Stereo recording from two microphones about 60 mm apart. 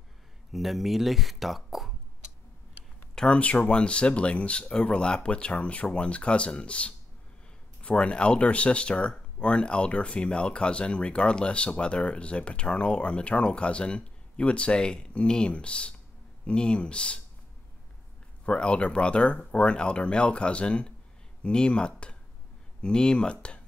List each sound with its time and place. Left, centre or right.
0.5 s speech: centre
3.2 s speech: centre
18.4 s speech: centre